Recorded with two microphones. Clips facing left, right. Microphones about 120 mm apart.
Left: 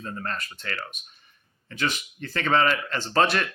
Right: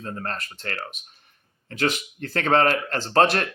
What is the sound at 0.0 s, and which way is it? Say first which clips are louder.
Speech: right 1 dB; 50° right (ahead or behind).